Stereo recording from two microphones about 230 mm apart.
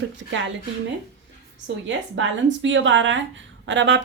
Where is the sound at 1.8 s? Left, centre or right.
Right.